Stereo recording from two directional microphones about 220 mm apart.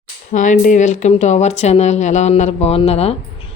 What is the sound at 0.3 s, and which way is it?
Speech, 35° left (ahead or behind).